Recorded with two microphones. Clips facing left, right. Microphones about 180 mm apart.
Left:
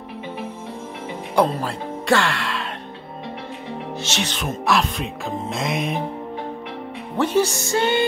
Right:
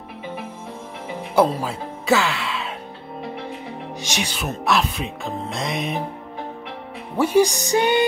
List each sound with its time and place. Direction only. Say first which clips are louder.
1.3 s speech: right 1 dB; 5° right (ahead or behind)
4.0 s speech: right 1 dB; 15° right (ahead or behind)
7.2 s music: right 2 dB; 10° right (ahead or behind)